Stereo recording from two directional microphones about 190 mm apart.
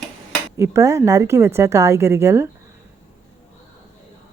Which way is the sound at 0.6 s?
15° right (ahead or behind).